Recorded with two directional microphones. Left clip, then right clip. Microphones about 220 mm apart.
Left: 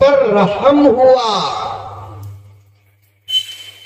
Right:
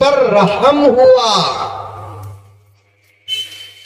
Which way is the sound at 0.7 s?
45° right (ahead or behind).